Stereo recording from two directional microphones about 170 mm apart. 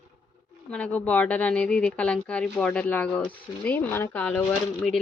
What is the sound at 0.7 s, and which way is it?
A woman's voice, 10° left (ahead or behind).